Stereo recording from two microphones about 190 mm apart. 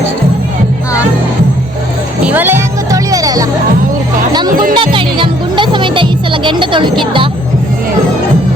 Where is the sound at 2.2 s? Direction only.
10° right (ahead or behind).